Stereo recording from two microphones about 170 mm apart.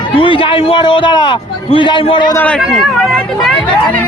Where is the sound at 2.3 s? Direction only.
10° left (ahead or behind).